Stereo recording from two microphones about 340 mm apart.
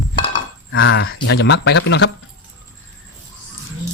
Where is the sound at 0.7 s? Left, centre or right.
Left.